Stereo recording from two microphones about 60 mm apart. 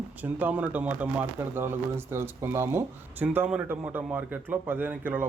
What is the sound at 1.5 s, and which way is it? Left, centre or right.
Speech, right.